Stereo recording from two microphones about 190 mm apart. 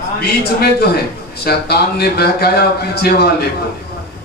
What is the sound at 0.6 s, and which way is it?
A man's voice, 55° left (ahead or behind).